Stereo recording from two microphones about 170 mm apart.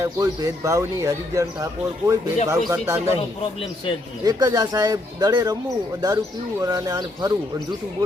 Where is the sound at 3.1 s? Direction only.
30° left (ahead or behind).